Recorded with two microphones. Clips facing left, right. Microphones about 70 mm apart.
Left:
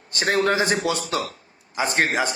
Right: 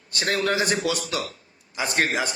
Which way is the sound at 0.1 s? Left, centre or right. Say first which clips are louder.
Left 3 dB; left.